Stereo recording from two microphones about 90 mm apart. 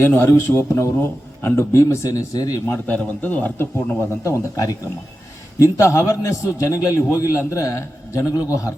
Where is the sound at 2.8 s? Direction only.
15° left (ahead or behind).